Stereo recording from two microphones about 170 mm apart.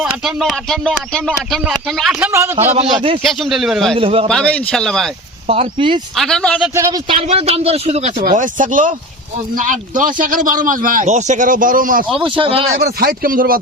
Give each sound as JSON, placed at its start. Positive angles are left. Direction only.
{"t": 0.0, "sound": "speech", "side_deg": -5}
{"t": 2.3, "sound": "a man's voice", "side_deg": -15}
{"t": 3.2, "sound": "speech", "side_deg": 0}
{"t": 3.9, "sound": "speech", "side_deg": -35}
{"t": 4.3, "sound": "speech", "side_deg": 5}
{"t": 5.5, "sound": "speech", "side_deg": -35}
{"t": 6.1, "sound": "speech", "side_deg": 5}
{"t": 6.7, "sound": "a man's voice", "side_deg": -15}
{"t": 7.1, "sound": "speech", "side_deg": -35}
{"t": 8.2, "sound": "a man's voice", "side_deg": -50}
{"t": 12.1, "sound": "speech", "side_deg": -30}
{"t": 12.7, "sound": "speech", "side_deg": -65}